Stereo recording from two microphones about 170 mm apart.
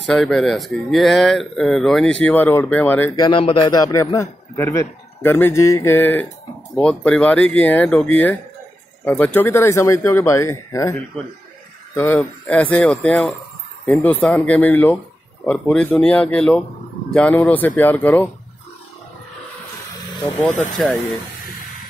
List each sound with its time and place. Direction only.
0.0 s speech: centre (ahead or behind)
3.2 s a man's voice: 30° left (ahead or behind); by 18.3 s 10° left (ahead or behind)
20.7 s speech: 5° left (ahead or behind)